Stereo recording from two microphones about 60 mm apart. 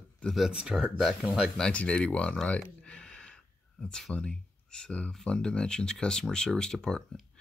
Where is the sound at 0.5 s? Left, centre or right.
Centre.